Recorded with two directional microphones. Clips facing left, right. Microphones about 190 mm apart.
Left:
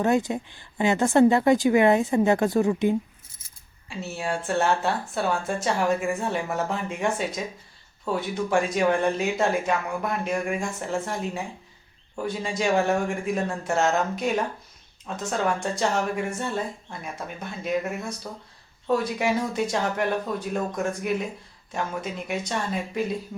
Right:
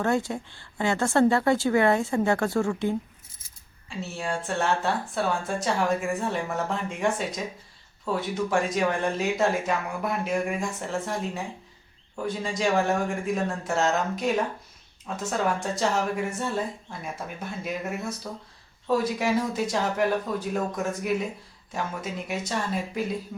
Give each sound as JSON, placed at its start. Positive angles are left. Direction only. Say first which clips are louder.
{"t": 0.0, "sound": "a woman's voice", "louder": "left 3 dB", "side_deg": 20}
{"t": 3.8, "sound": "speech", "louder": "left 2 dB", "side_deg": 5}